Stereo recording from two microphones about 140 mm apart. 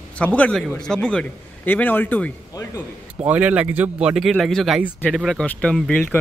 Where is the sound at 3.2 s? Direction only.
10° right (ahead or behind).